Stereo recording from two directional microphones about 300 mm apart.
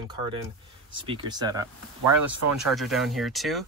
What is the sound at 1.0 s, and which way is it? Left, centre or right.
Speech, centre.